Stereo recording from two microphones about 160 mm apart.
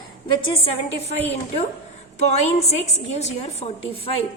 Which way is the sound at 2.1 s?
45° left (ahead or behind).